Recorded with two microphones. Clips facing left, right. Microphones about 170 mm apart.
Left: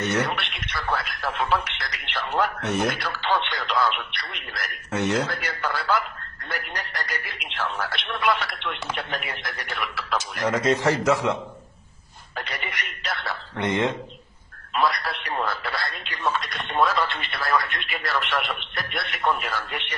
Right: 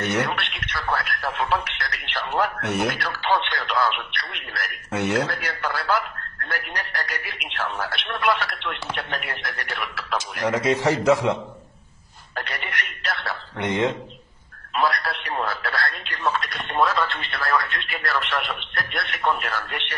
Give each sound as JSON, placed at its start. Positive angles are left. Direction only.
{"t": 0.2, "sound": "radio", "side_deg": 0}
{"t": 3.1, "sound": "radio", "side_deg": -10}
{"t": 3.3, "sound": "radio", "side_deg": 0}
{"t": 5.2, "sound": "speech", "side_deg": -5}
{"t": 10.1, "sound": "speech", "side_deg": -10}
{"t": 12.4, "sound": "a sound", "side_deg": 0}
{"t": 13.7, "sound": "a man's voice", "side_deg": -20}
{"t": 14.8, "sound": "speech", "side_deg": 0}